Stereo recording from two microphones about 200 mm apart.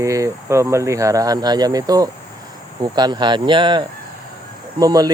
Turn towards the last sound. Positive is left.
turn(degrees=-20)  # may be behind; listen again after turning